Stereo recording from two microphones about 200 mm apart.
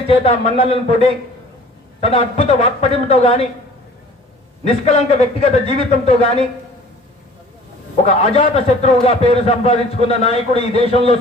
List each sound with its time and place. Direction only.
0.1 s a man's voice: 30° left (ahead or behind)
4.6 s a man's voice: 30° left (ahead or behind)
8.0 s a man's voice: 30° left (ahead or behind)